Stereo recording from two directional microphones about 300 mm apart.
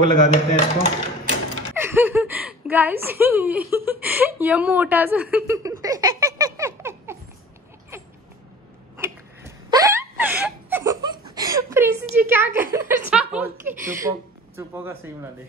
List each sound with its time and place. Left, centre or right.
0.2 s speech: centre
1.8 s a sound: centre
12.7 s a woman's voice: centre